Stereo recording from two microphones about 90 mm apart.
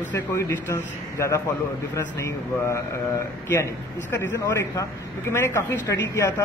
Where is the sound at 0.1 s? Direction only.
25° left (ahead or behind).